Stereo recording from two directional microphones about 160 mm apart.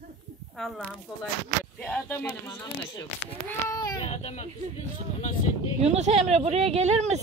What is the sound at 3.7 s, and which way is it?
Child singing, 25° left (ahead or behind).